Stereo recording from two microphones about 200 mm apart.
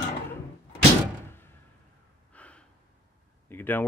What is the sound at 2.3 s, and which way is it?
Gasp, 5° left (ahead or behind).